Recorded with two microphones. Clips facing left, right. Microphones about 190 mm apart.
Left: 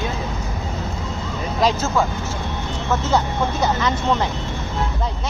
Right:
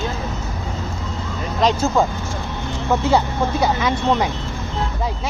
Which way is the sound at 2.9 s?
10° right (ahead or behind).